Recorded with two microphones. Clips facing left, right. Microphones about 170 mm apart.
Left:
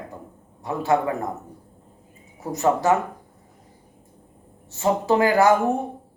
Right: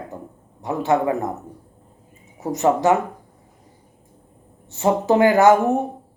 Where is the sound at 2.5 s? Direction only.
20° right (ahead or behind).